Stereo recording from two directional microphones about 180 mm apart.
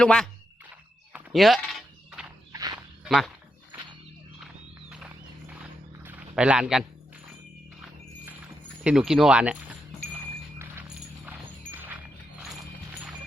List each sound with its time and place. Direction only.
0.0 s speech: 5° left (ahead or behind)
1.1 s walk: centre (ahead or behind)
2.5 s walk: 20° right (ahead or behind)
3.0 s speech: centre (ahead or behind)
4.4 s a sound: 5° right (ahead or behind)
11.3 s dog: 10° right (ahead or behind)